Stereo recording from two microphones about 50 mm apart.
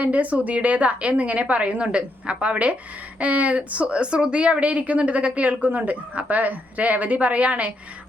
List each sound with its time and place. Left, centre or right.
0.0 s a woman's voice: right